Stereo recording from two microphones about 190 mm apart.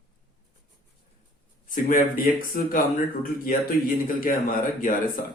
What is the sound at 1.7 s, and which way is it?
Speech, 45° left (ahead or behind).